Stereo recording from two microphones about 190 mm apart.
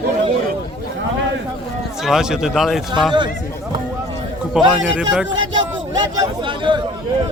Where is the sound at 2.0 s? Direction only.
5° right (ahead or behind).